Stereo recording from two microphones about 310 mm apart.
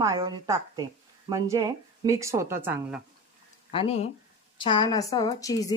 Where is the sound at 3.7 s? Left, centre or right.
Centre.